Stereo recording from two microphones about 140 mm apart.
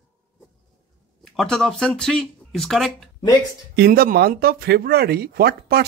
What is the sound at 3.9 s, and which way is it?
Speech, 90° right.